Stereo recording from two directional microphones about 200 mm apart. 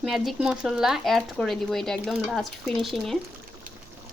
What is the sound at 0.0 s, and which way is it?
Speech, centre (ahead or behind).